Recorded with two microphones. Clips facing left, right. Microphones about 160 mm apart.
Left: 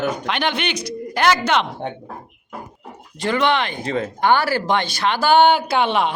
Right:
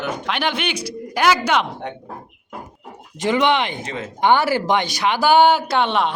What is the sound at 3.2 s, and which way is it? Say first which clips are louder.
A man's voice: right 1 dB; 15° right (ahead or behind).